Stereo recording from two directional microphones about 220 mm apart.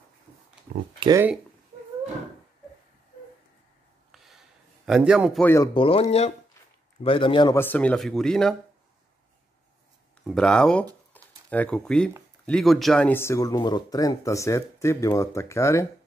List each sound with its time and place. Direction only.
0.9 s speech: 20° right (ahead or behind)
4.1 s a sound: centre (ahead or behind)
5.4 s speech: 10° left (ahead or behind)
5.8 s a man's voice: 25° left (ahead or behind)
7.5 s speech: 10° left (ahead or behind)
10.2 s speech: 5° left (ahead or behind)